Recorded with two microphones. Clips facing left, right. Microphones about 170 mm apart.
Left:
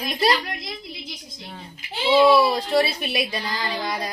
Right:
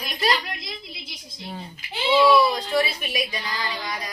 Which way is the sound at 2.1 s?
25° left (ahead or behind).